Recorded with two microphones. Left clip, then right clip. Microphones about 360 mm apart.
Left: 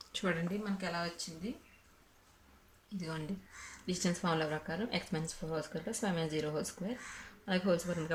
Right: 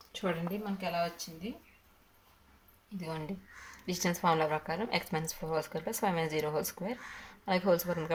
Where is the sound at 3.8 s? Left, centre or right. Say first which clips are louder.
Right 6 dB; centre.